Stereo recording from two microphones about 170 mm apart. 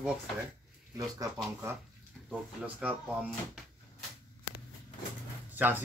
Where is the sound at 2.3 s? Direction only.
5° right (ahead or behind).